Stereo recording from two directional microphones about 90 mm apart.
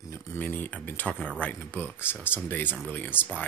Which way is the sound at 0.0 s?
30° left (ahead or behind).